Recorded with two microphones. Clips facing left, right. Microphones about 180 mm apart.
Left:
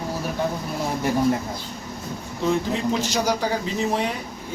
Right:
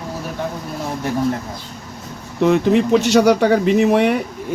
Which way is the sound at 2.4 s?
70° right (ahead or behind).